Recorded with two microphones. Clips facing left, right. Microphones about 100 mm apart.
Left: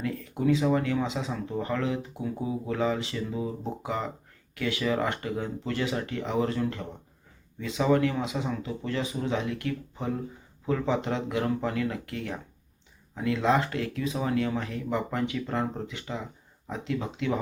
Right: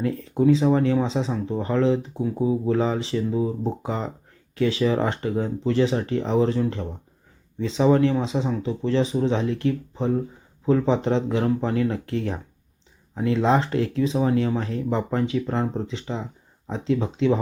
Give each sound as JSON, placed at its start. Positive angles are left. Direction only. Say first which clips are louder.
{"t": 0.0, "sound": "speech", "louder": "right 7 dB", "side_deg": -30}